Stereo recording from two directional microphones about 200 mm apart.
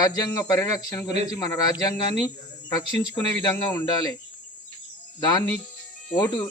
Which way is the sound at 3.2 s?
10° left (ahead or behind).